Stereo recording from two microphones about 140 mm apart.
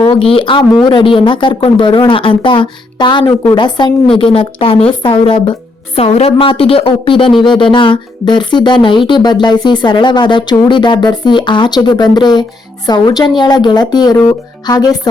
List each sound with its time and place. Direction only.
0.1 s speech: 40° left (ahead or behind)